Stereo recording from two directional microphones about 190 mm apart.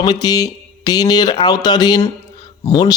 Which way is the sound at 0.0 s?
20° left (ahead or behind).